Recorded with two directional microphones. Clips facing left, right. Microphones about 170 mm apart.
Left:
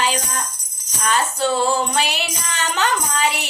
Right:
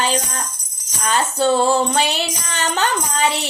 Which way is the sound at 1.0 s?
30° right (ahead or behind).